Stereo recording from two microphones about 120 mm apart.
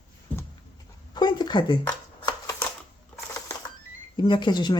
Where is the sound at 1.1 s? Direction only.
40° left (ahead or behind).